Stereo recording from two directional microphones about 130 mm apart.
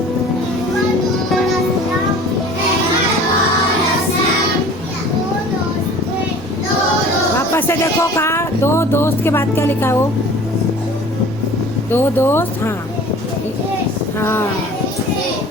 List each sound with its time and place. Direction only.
7.3 s music: 20° left (ahead or behind)
11.9 s speech: 15° left (ahead or behind)
14.2 s speech: 20° left (ahead or behind)